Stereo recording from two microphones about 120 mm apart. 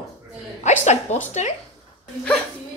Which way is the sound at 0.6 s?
80° left.